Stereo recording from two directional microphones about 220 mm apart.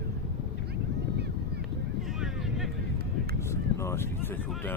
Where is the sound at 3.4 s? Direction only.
10° left (ahead or behind).